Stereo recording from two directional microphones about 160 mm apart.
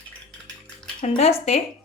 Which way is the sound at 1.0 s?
40° left (ahead or behind).